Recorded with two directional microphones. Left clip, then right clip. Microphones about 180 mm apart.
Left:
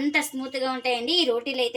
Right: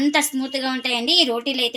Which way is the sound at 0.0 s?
45° right (ahead or behind).